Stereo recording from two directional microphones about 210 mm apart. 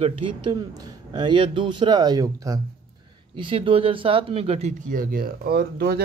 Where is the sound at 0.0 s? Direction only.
20° right (ahead or behind).